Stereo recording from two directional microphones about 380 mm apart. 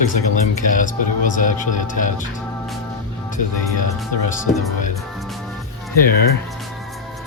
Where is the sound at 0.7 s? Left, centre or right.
Left.